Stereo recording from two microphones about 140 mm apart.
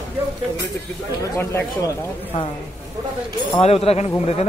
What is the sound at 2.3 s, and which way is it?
Speech, 45° left (ahead or behind).